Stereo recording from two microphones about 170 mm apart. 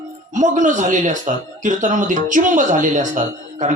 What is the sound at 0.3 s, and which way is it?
A man's voice, 50° right (ahead or behind).